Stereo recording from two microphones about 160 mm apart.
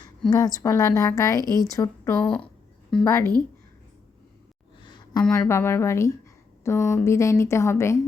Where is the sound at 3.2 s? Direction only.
25° right (ahead or behind).